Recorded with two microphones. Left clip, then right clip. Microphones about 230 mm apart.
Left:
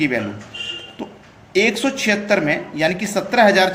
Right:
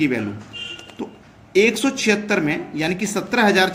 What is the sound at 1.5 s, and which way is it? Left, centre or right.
A man's voice, right.